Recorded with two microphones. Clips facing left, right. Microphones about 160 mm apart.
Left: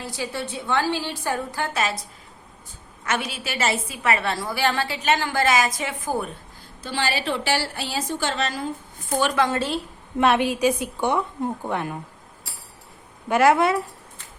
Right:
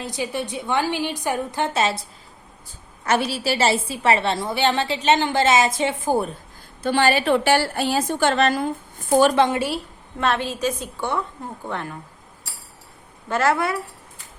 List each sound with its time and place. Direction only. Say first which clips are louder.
0.0 s a woman's voice: right 3 dB; 20° right (ahead or behind)
6.8 s a woman's voice: right 7 dB; 55° right (ahead or behind)
9.1 s a woman's voice: right 7 dB; 40° right (ahead or behind)
9.5 s a woman's voice: right 1 dB; 10° right (ahead or behind)
10.2 s a woman's voice: left 4 dB; 15° left (ahead or behind)
13.2 s a woman's voice: left 3 dB; 15° left (ahead or behind)